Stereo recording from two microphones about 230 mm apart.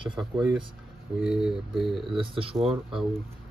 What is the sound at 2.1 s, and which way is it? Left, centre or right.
Speech, right.